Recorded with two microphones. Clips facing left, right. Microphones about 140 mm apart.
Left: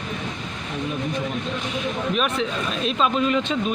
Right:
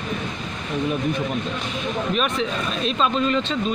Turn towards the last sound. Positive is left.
turn(degrees=15)  # may be behind; listen again after turning